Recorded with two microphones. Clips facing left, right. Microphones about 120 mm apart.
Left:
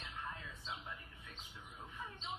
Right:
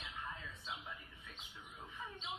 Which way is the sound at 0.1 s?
Centre (ahead or behind).